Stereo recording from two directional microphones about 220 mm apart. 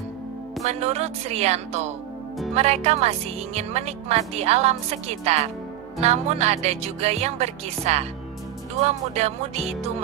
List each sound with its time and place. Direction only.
0.7 s speech: 30° right (ahead or behind)